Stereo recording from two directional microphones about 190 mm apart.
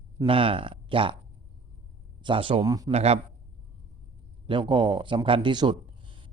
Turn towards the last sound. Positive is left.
turn(degrees=-25)  # may be behind; listen again after turning